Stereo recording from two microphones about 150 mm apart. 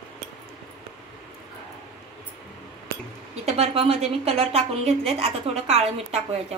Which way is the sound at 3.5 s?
40° right (ahead or behind).